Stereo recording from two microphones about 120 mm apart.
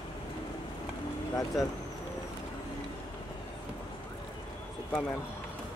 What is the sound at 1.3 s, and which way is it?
Speech, 30° left (ahead or behind).